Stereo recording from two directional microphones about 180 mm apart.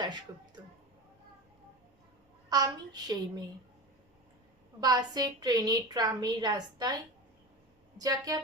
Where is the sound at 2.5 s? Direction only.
20° right (ahead or behind).